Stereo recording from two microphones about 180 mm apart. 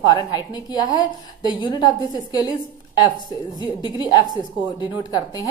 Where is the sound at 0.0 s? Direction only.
25° left (ahead or behind).